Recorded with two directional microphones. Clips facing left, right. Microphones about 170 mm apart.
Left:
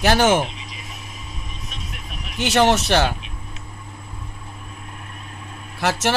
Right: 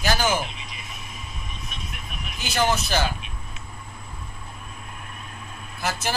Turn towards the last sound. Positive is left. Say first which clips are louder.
# left 7 dB
turn(degrees=80)